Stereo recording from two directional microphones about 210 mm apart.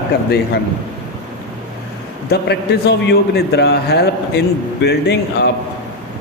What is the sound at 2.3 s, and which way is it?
A man's voice, 50° left (ahead or behind).